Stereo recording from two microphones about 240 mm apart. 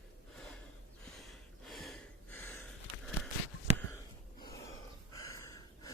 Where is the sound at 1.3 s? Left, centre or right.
Centre.